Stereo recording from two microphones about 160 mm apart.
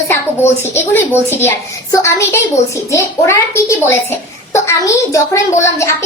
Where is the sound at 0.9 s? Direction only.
15° left (ahead or behind).